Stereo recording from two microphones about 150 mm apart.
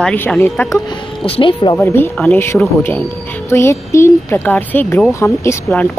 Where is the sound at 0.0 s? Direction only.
10° left (ahead or behind).